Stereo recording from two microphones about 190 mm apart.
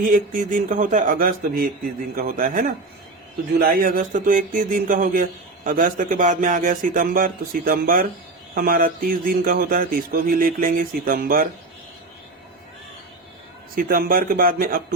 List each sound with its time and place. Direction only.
0.0 s speech: 45° right (ahead or behind)
13.7 s speech: 50° right (ahead or behind)